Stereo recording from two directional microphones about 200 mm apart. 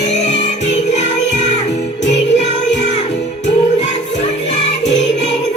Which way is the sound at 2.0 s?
60° left (ahead or behind).